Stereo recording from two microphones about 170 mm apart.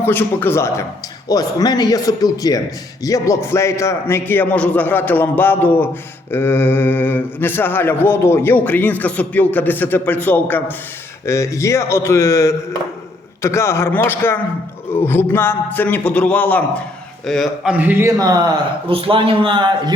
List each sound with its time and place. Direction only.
0.0 s a man's voice: 10° left (ahead or behind); by 18.1 s 10° right (ahead or behind)
18.2 s speech: 25° right (ahead or behind)